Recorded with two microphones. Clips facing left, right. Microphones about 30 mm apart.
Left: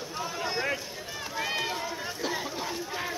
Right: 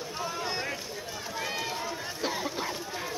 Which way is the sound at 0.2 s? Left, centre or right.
Centre.